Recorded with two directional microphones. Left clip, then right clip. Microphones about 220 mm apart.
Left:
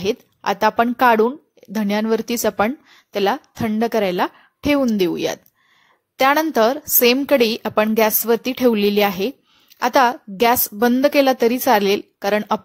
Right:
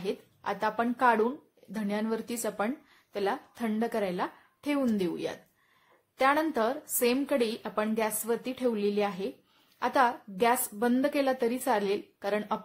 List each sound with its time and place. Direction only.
0.0 s speech: 35° left (ahead or behind)